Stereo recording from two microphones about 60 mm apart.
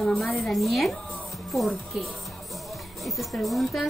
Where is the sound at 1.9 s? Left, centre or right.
Centre.